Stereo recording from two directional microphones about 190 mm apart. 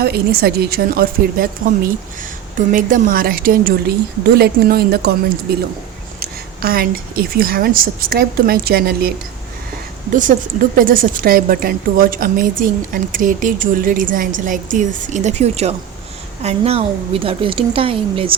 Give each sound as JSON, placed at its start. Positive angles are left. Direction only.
{"t": 0.0, "sound": "speech", "side_deg": -55}
{"t": 2.6, "sound": "speech", "side_deg": -45}
{"t": 6.1, "sound": "a woman's voice", "side_deg": -50}